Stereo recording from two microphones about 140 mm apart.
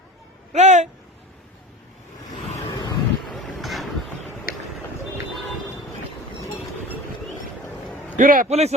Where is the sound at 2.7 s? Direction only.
25° left (ahead or behind).